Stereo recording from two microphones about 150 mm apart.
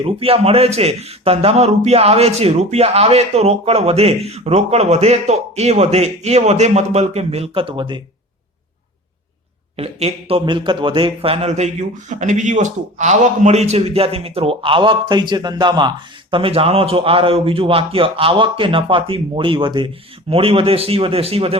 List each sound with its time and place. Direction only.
0.0 s a man's voice: 40° right (ahead or behind)
9.7 s a man's voice: 40° right (ahead or behind)